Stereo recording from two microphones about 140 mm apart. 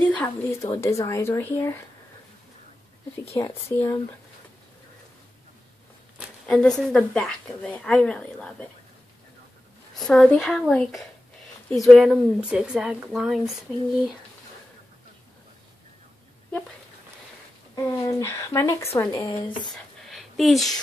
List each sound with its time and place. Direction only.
0.0 s speech: 15° left (ahead or behind)
3.3 s speech: 20° left (ahead or behind)
6.4 s speech: 5° left (ahead or behind)
9.9 s speech: 5° left (ahead or behind)
17.7 s speech: 20° left (ahead or behind)
19.7 s a sound: centre (ahead or behind)